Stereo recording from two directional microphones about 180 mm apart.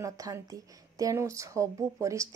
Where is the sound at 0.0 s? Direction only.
20° right (ahead or behind).